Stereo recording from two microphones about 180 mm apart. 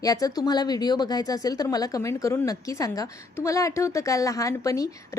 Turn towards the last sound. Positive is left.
turn(degrees=20)  # may be behind; listen again after turning